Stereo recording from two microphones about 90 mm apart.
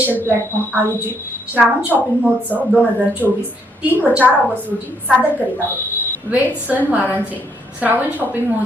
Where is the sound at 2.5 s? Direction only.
20° right (ahead or behind).